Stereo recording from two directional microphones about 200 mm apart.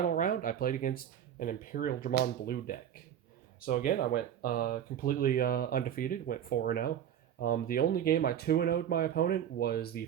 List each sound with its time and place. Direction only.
0.0 s speech: 45° left (ahead or behind)